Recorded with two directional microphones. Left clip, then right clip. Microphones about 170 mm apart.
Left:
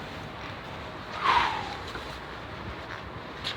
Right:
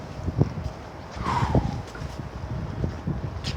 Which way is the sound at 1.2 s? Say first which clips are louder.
Left 4 dB; 20° right (ahead or behind).